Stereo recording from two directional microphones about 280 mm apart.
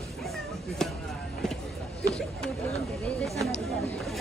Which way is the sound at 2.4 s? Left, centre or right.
Centre.